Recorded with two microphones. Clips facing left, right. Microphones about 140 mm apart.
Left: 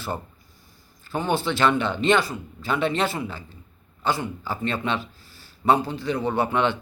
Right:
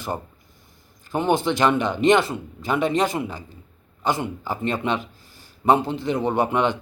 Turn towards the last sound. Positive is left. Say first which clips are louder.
# right 2 dB
turn(degrees=-15)  # may be behind; listen again after turning